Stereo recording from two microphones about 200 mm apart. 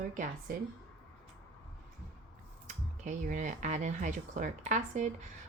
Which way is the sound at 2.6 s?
40° right (ahead or behind).